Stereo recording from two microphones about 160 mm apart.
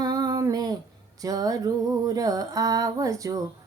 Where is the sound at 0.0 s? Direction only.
25° right (ahead or behind).